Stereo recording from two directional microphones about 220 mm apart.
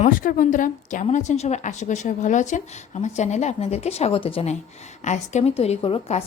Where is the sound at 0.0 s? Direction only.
40° left (ahead or behind).